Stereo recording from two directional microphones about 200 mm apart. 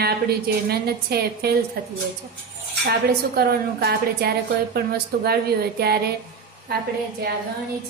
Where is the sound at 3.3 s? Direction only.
50° right (ahead or behind).